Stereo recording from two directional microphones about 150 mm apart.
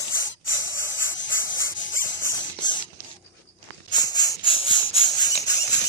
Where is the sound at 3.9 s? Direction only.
25° left (ahead or behind).